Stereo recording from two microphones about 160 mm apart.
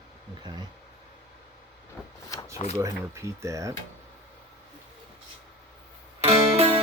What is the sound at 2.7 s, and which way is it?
Speech, 20° right (ahead or behind).